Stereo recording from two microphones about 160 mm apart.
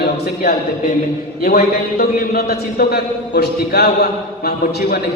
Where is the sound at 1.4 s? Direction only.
70° left (ahead or behind).